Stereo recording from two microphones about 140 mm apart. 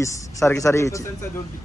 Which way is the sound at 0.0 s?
20° left (ahead or behind).